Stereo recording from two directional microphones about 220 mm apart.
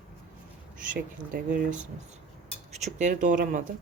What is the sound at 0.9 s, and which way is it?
Speech, 40° right (ahead or behind).